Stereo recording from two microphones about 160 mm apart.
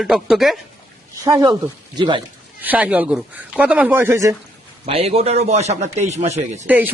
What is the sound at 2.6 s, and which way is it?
Speech, 10° right (ahead or behind).